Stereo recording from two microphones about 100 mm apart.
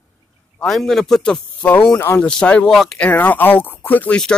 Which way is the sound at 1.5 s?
15° left (ahead or behind).